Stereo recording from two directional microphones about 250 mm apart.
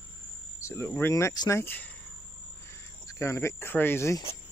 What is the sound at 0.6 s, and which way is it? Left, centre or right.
Speech, centre.